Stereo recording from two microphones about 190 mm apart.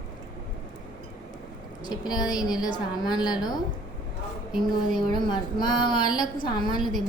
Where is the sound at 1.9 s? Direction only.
20° left (ahead or behind).